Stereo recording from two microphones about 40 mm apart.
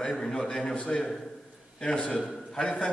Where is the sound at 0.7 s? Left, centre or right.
Left; by 2.7 s centre.